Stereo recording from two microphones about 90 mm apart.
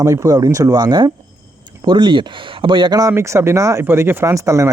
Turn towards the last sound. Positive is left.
turn(degrees=-35)  # may be behind; listen again after turning